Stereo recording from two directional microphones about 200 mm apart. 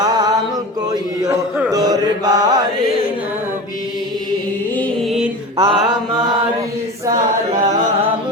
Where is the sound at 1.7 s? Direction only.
20° right (ahead or behind).